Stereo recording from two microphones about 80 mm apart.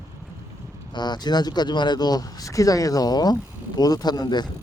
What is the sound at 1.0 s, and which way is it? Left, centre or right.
Speech, left.